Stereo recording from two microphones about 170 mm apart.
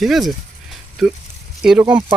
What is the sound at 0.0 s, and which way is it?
Speech, centre (ahead or behind).